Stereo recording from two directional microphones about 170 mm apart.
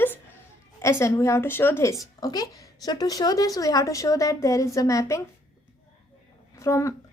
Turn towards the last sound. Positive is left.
turn(degrees=15)  # may be behind; listen again after turning